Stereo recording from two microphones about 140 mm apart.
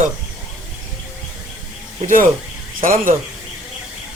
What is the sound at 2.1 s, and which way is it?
Speech, 70° right (ahead or behind).